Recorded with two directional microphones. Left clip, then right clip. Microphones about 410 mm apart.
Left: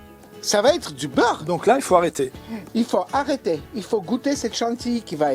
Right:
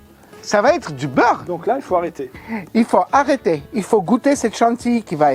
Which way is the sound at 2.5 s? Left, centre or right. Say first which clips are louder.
Right 7 dB; centre.